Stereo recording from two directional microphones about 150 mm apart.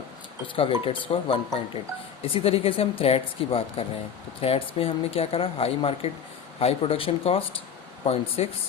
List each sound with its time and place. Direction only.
0.4 s speech: 35° left (ahead or behind)